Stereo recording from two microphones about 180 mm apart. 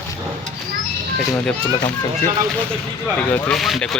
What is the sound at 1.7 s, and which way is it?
Speech, 25° left (ahead or behind).